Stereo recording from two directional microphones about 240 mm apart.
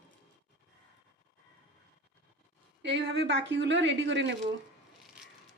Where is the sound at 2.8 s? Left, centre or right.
Right.